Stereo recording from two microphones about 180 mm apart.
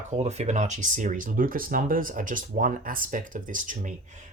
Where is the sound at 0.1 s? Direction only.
40° right (ahead or behind).